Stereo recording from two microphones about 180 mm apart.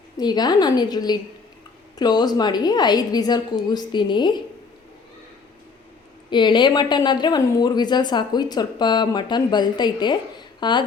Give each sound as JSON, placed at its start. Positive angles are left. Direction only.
{"t": 0.2, "sound": "a woman's voice", "side_deg": 25}
{"t": 6.3, "sound": "a woman's voice", "side_deg": 25}